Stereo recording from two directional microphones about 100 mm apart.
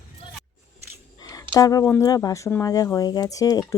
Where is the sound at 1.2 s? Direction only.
40° left (ahead or behind).